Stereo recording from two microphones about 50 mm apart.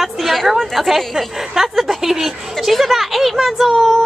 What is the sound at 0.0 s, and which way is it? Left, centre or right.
A woman's voice, centre.